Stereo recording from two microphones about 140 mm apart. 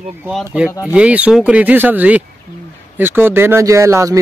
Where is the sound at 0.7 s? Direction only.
20° left (ahead or behind).